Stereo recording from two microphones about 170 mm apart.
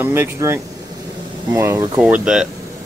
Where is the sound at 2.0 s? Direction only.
5° right (ahead or behind).